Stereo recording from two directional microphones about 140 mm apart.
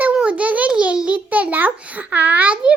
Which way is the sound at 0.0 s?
10° right (ahead or behind).